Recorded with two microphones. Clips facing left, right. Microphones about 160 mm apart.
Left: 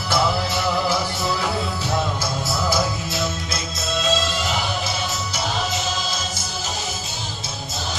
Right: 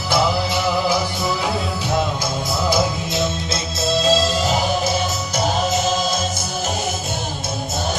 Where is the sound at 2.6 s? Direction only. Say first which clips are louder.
Right 4 dB; 20° right (ahead or behind); by 4.6 s 35° right (ahead or behind).